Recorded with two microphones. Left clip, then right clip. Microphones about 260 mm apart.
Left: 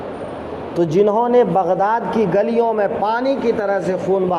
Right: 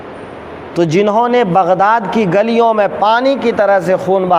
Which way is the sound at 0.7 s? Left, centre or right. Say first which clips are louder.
Right 4 dB; right.